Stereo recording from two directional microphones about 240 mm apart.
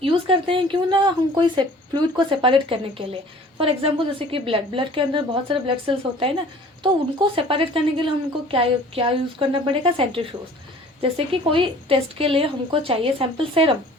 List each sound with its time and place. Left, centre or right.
0.0 s a woman's voice: right